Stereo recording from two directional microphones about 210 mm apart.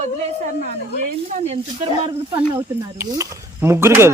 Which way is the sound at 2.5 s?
15° right (ahead or behind).